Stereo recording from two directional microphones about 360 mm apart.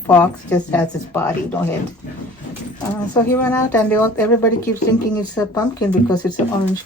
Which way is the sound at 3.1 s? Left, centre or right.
Centre.